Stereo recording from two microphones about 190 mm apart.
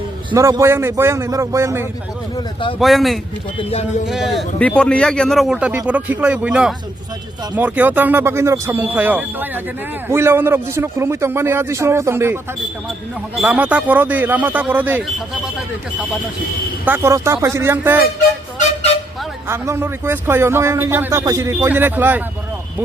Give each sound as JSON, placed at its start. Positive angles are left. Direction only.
{"t": 0.3, "sound": "a man's voice", "side_deg": -20}
{"t": 2.7, "sound": "speech", "side_deg": 0}
{"t": 3.7, "sound": "speech", "side_deg": 35}
{"t": 4.0, "sound": "a man's voice", "side_deg": 0}
{"t": 16.8, "sound": "a man's voice", "side_deg": -10}
{"t": 19.5, "sound": "a man's voice", "side_deg": -15}